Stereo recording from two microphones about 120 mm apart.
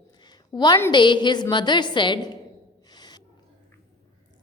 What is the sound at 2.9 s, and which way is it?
Gasp, 35° left (ahead or behind).